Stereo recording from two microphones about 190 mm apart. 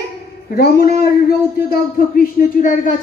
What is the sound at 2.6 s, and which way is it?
Speech, 45° left (ahead or behind).